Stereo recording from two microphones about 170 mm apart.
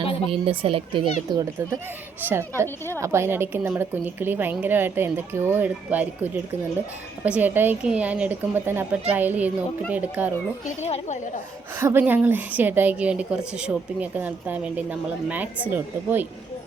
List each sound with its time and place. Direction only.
0.0 s a sound: 35° left (ahead or behind)
0.3 s a child's voice: 35° right (ahead or behind)
2.2 s a woman's voice: 15° right (ahead or behind)
10.8 s a woman's voice: 35° left (ahead or behind)
11.8 s a woman's voice: 15° right (ahead or behind)